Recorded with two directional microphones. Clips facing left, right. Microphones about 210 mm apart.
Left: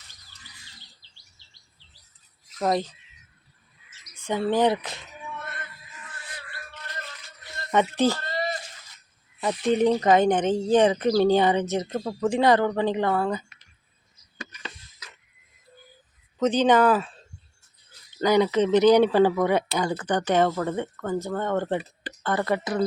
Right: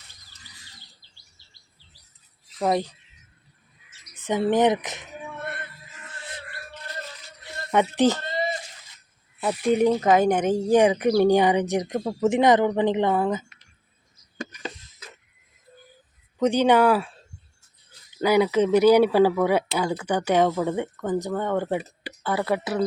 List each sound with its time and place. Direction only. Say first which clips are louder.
2.6 s speech: right 1 dB; 10° right (ahead or behind)
4.1 s speech: right 2 dB; 20° right (ahead or behind)
6.1 s music: right 4 dB; 25° right (ahead or behind)
7.7 s speech: right 2 dB; 15° right (ahead or behind)
9.4 s speech: right 1 dB; 5° right (ahead or behind)
16.4 s speech: right 1 dB; 10° right (ahead or behind)
18.2 s speech: right 1 dB; 10° right (ahead or behind)